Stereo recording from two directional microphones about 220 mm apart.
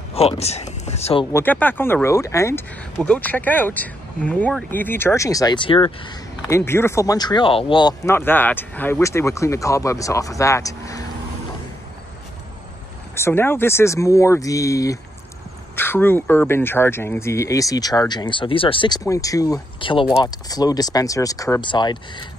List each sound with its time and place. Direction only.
0.1 s speech: 30° left (ahead or behind)
1.3 s speech: 10° left (ahead or behind)
13.1 s speech: 10° left (ahead or behind)